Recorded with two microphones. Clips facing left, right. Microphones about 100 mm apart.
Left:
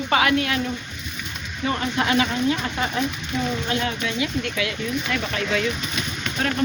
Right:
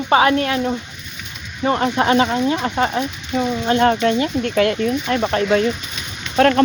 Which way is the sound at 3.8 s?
55° right (ahead or behind).